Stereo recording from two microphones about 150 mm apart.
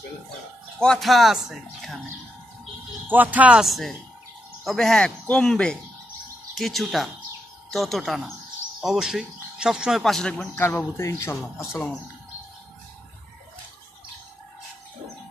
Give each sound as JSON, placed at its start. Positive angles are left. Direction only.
{"t": 0.7, "sound": "speech", "side_deg": 5}
{"t": 3.1, "sound": "speech", "side_deg": -10}
{"t": 10.5, "sound": "speech", "side_deg": 15}